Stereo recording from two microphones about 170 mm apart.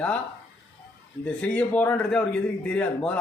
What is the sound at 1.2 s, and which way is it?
A man's voice, 10° left (ahead or behind).